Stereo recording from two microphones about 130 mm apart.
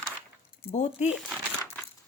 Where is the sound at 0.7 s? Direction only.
70° left (ahead or behind).